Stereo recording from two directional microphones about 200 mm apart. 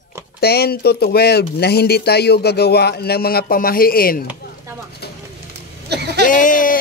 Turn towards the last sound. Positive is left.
turn(degrees=40)  # may be behind; listen again after turning